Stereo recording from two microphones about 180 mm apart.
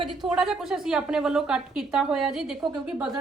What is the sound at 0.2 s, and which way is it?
A woman's voice, 5° right (ahead or behind).